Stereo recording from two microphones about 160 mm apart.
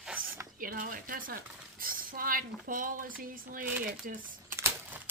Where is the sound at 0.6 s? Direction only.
60° right (ahead or behind).